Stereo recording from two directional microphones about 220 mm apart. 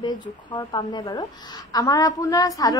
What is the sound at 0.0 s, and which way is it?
A woman's voice, 20° left (ahead or behind).